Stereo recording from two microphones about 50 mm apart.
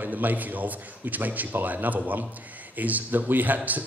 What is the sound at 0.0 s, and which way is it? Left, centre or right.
Speech, right.